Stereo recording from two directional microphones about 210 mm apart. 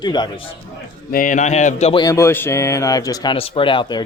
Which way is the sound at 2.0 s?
15° left (ahead or behind).